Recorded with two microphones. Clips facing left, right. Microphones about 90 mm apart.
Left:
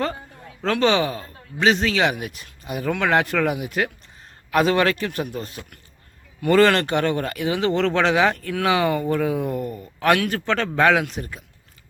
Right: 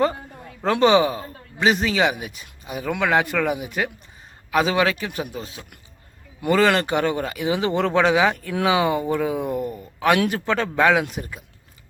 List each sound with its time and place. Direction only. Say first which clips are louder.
0.6 s speech: right 3 dB; 20° right (ahead or behind)
1.5 s speech: even; 5° right (ahead or behind)
9.1 s speech: even; 5° right (ahead or behind)